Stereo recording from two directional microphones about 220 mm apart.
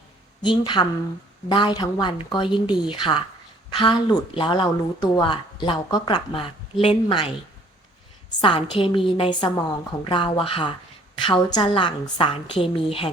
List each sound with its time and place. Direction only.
0.4 s speech: 20° left (ahead or behind)
8.4 s speech: 25° left (ahead or behind)